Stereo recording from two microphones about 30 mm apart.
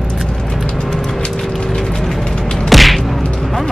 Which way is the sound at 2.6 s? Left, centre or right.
Centre.